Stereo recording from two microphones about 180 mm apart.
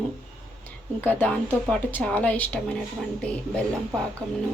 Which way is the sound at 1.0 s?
10° left (ahead or behind).